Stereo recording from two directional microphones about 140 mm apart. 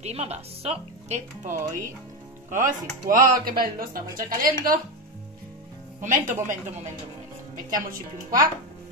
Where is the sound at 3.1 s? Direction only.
80° right.